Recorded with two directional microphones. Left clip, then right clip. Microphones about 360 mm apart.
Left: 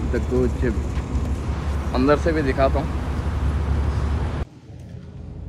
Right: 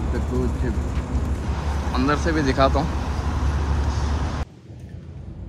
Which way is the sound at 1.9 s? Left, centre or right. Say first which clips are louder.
Left 4 dB; centre.